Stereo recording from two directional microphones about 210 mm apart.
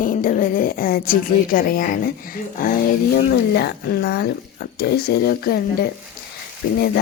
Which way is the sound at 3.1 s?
50° left (ahead or behind).